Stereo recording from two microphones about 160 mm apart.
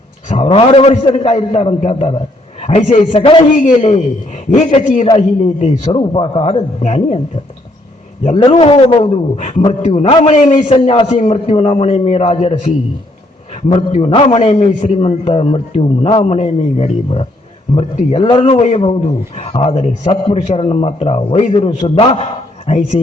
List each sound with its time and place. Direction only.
0.3 s a man's voice: 40° left (ahead or behind)
3.5 s a man's voice: 45° left (ahead or behind)
8.5 s a man's voice: 35° left (ahead or behind)
13.7 s a man's voice: 45° left (ahead or behind)